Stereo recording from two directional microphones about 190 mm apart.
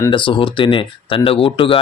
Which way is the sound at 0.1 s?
25° left (ahead or behind).